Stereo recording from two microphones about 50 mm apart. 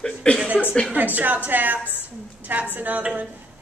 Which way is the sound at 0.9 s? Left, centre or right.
Right.